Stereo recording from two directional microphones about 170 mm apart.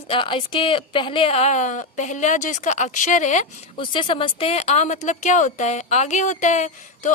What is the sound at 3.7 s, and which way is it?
A woman's voice, 30° left (ahead or behind).